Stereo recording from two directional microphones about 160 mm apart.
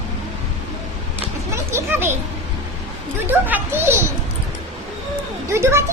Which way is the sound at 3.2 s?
10° right (ahead or behind).